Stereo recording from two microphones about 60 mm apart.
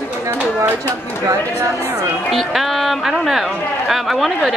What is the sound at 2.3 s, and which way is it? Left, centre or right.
Speech, centre.